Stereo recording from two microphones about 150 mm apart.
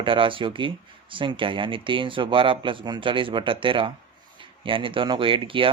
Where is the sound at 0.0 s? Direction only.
35° right (ahead or behind).